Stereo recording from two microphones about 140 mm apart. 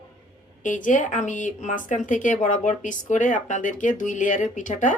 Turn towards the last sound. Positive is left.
turn(degrees=65)  # may be behind; listen again after turning